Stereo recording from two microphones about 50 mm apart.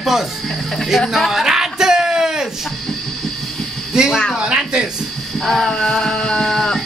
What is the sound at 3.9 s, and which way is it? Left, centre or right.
Speech, centre.